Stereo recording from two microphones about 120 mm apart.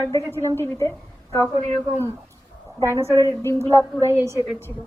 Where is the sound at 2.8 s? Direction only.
25° right (ahead or behind).